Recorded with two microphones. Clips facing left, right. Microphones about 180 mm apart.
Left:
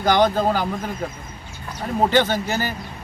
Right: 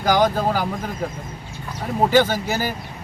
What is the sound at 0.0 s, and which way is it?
Speech, 10° right (ahead or behind).